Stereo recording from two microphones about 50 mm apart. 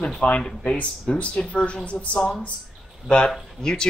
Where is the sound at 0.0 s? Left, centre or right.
Left.